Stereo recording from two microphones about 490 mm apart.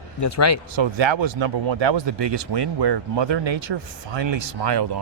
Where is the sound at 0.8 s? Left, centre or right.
Right.